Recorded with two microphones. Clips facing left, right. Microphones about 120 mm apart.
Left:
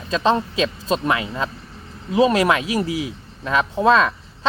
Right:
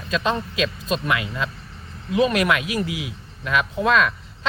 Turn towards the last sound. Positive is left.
turn(degrees=30)  # may be behind; listen again after turning